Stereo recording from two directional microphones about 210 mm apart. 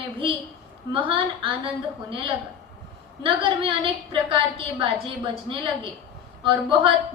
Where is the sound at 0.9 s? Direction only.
25° right (ahead or behind).